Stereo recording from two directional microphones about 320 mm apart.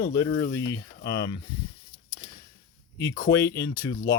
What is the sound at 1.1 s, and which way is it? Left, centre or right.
Speech, centre.